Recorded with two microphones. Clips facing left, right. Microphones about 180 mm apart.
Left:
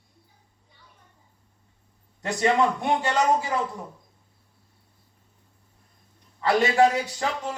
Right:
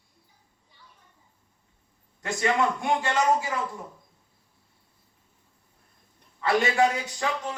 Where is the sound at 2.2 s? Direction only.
35° left (ahead or behind).